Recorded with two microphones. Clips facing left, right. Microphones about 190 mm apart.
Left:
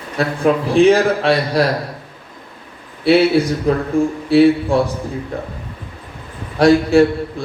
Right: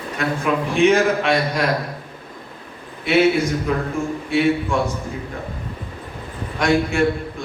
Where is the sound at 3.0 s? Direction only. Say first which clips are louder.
Left 4 dB; 35° left (ahead or behind).